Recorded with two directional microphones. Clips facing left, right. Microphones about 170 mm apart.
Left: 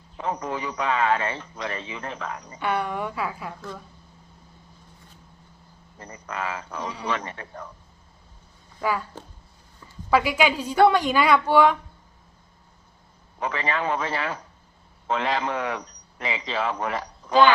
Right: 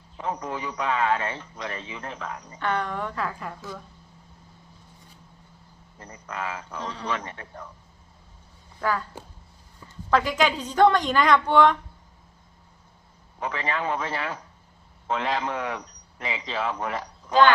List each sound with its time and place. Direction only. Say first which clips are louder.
0.2 s a man's voice: left 2 dB; 80° left
2.6 s a woman's voice: left 1 dB; 10° left (ahead or behind)
6.0 s speech: left 2 dB; 75° left (ahead or behind)
6.8 s a woman's voice: left 1 dB; 15° left (ahead or behind)
7.1 s a man's voice: left 2 dB; 85° left
8.8 s a woman's voice: left 1 dB; 10° left (ahead or behind)
10.1 s a woman's voice: left 1 dB; 10° left (ahead or behind)
13.4 s a man's voice: left 2 dB; 80° left